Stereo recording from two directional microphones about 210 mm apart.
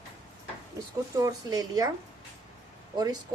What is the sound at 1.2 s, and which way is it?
Speech, 15° right (ahead or behind).